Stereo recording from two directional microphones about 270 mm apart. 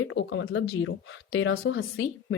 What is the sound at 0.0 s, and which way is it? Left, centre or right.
Speech, left.